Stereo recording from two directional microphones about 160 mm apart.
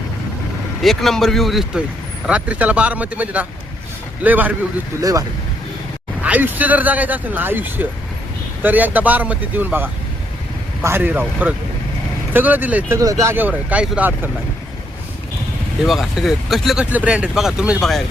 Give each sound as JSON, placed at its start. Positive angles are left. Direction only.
{"t": 0.8, "sound": "speech", "side_deg": 0}
{"t": 4.9, "sound": "speech", "side_deg": -20}
{"t": 6.2, "sound": "speech", "side_deg": -10}
{"t": 15.8, "sound": "speech", "side_deg": 0}